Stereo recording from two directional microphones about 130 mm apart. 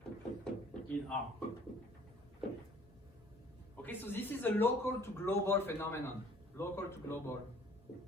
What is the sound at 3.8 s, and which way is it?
A man's voice, 15° left (ahead or behind).